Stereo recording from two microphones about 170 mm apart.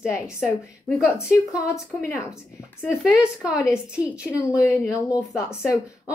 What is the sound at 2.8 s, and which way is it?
A woman's voice, 5° right (ahead or behind).